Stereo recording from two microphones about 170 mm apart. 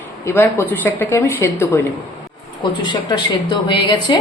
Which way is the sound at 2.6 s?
25° left (ahead or behind).